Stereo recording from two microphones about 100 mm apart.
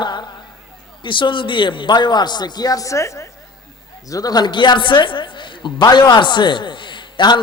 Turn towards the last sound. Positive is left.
turn(degrees=50)  # may be behind; listen again after turning